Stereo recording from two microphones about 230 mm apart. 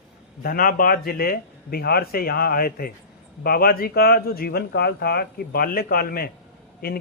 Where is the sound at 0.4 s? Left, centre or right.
Left.